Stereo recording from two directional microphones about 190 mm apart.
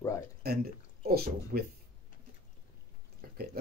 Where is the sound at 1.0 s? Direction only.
55° right (ahead or behind).